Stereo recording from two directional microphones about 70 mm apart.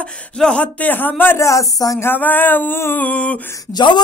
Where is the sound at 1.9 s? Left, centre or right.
Left.